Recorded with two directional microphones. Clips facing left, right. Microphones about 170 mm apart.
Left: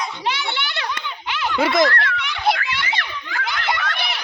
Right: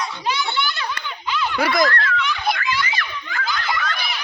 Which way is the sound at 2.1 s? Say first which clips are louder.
Left 1 dB; 70° left (ahead or behind).